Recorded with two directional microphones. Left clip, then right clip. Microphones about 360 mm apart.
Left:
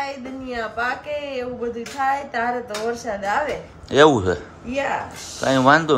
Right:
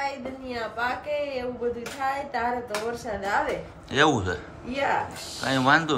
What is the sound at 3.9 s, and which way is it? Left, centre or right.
Speech, centre.